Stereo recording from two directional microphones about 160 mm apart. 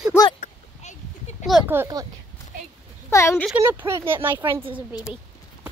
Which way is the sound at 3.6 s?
15° right (ahead or behind).